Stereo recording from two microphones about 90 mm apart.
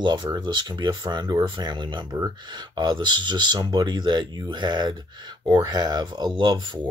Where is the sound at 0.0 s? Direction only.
55° right (ahead or behind).